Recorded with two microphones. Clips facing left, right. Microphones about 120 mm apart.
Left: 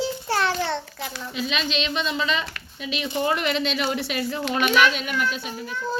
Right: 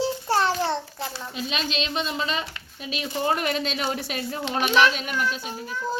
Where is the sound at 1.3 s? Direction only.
45° right (ahead or behind).